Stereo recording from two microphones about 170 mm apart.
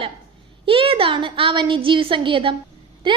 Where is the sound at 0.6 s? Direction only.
30° right (ahead or behind).